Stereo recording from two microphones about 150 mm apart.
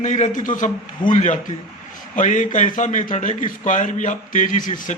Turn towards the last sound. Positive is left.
turn(degrees=60)  # may be behind; listen again after turning